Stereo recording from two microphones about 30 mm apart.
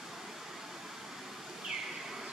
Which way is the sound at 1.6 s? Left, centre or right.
Centre.